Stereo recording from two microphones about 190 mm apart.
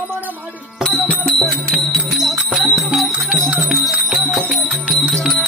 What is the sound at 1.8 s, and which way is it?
Music, centre (ahead or behind).